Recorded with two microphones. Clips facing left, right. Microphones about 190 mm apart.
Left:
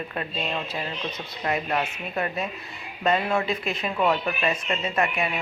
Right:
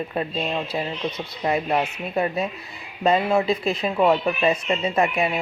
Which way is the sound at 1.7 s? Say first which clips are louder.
Right 4 dB; 15° right (ahead or behind).